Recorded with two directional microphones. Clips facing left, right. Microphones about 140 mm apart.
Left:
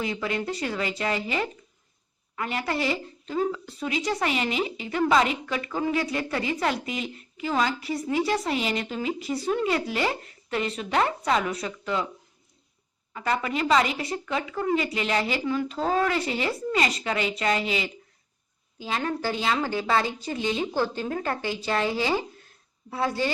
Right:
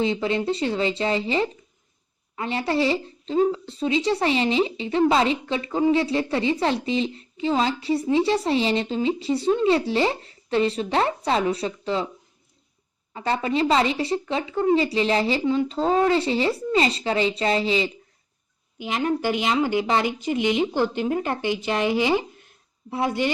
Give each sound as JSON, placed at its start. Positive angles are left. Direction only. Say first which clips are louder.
{"t": 0.0, "sound": "a woman's voice", "louder": "right 6 dB", "side_deg": -25}
{"t": 13.1, "sound": "a woman's voice", "louder": "right 4 dB", "side_deg": -30}
{"t": 18.8, "sound": "a woman's voice", "louder": "right 4 dB", "side_deg": -20}